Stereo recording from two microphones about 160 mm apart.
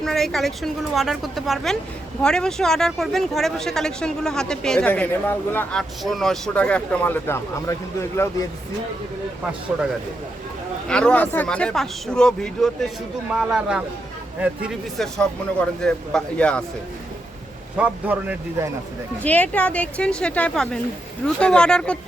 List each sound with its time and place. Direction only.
0.0 s speech: centre (ahead or behind)
6.0 s speech: centre (ahead or behind); by 8.4 s 20° left (ahead or behind)
10.8 s speech: 5° left (ahead or behind)
17.7 s a man's voice: 10° right (ahead or behind)
19.2 s speech: 10° left (ahead or behind)